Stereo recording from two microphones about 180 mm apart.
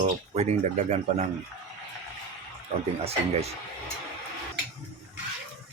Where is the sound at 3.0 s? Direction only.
35° right (ahead or behind).